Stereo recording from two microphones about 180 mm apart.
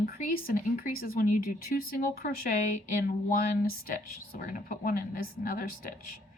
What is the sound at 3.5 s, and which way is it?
Speech, 50° left (ahead or behind).